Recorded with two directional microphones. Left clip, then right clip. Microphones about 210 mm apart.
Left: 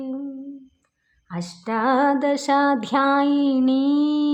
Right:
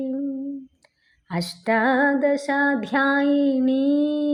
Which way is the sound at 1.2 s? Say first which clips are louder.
Right 6 dB; 10° right (ahead or behind).